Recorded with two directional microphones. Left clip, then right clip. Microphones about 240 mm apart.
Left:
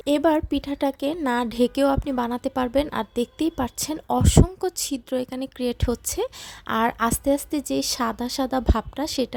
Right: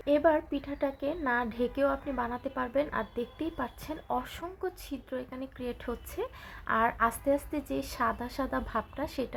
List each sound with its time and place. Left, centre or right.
0.0 s a woman's voice: left